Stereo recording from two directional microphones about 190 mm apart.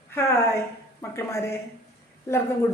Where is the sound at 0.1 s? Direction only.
15° left (ahead or behind).